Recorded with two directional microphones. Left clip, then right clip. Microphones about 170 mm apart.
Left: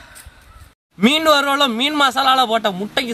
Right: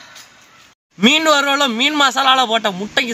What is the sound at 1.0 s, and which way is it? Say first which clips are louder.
A man's voice: right 1 dB; centre (ahead or behind).